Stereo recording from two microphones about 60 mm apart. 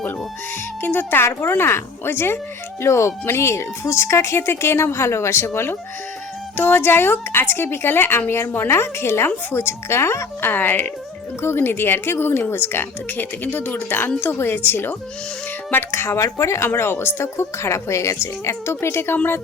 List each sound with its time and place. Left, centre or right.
0.8 s speech: left
2.8 s a woman's voice: left
6.6 s a woman's voice: left
10.4 s speech: left
11.4 s speech: left
16.6 s a woman's voice: left